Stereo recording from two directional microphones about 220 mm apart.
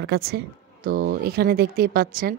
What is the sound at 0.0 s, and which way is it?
Speech, 45° right (ahead or behind).